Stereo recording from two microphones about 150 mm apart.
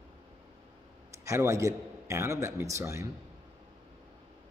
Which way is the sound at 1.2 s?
20° right (ahead or behind).